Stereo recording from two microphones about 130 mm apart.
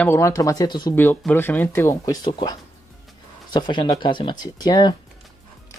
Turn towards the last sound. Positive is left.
turn(degrees=30)  # may be behind; listen again after turning